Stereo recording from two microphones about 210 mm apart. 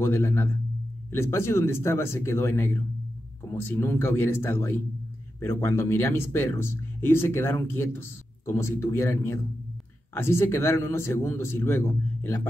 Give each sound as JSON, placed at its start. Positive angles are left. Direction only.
{"t": 0.0, "sound": "speech", "side_deg": 10}